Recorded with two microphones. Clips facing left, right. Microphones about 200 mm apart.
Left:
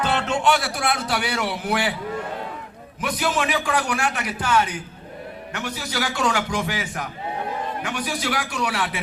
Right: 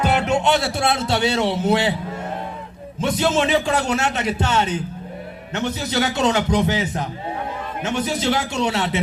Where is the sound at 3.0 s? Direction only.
25° right (ahead or behind).